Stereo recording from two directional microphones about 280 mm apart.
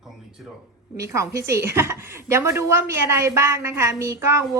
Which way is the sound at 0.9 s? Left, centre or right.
Centre.